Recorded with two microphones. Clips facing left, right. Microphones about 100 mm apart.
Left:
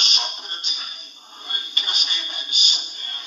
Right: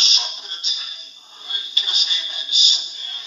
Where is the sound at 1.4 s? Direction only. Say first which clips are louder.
Left 1 dB; 50° left (ahead or behind).